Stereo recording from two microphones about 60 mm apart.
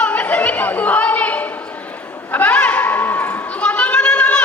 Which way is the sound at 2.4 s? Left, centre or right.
Left.